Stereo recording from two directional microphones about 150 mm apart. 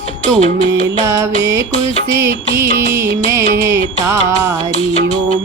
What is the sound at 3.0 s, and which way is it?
Music, 20° right (ahead or behind).